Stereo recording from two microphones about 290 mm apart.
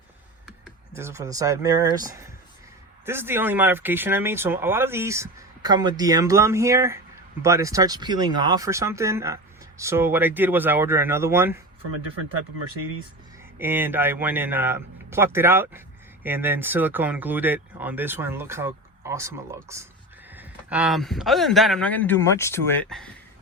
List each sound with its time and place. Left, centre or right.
0.6 s speech: centre
3.1 s speech: centre
13.6 s speech: centre